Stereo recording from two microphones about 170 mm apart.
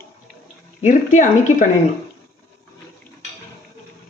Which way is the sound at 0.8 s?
45° left (ahead or behind).